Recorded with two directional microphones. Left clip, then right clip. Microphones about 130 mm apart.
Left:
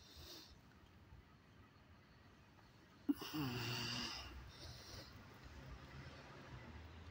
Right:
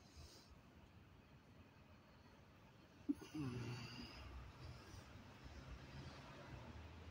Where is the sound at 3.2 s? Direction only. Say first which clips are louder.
Left 6 dB; 20° left (ahead or behind).